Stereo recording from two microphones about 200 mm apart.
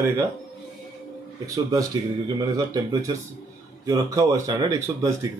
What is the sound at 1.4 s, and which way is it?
Speech, 15° right (ahead or behind).